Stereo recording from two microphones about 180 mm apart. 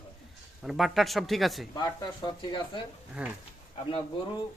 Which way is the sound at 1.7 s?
20° left (ahead or behind).